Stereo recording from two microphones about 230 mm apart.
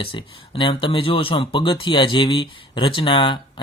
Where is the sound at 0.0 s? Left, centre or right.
Left.